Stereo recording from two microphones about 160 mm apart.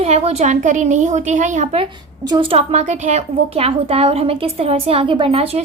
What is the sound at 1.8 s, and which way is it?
A woman's voice, 30° right (ahead or behind).